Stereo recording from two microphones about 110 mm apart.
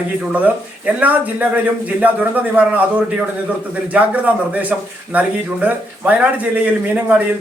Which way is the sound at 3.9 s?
10° right (ahead or behind).